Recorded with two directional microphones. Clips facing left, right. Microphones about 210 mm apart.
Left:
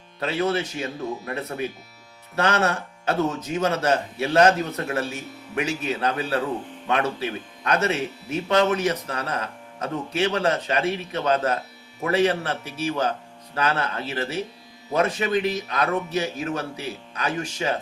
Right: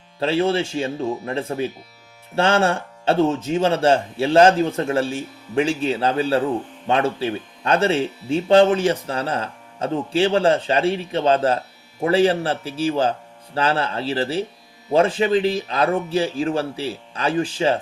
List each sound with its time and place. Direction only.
0.2 s speech: 30° right (ahead or behind)